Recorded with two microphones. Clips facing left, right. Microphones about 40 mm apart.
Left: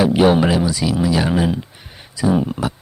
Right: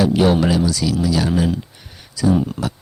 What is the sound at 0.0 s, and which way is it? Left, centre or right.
Speech, left.